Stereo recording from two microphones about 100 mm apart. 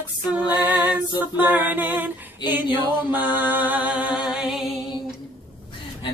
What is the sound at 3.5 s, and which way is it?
Music, 15° right (ahead or behind).